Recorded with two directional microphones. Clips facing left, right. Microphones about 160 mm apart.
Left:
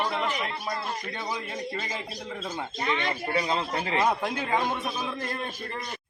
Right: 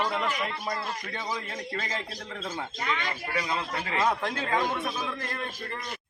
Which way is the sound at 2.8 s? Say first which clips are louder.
Left 5 dB; 25° left (ahead or behind).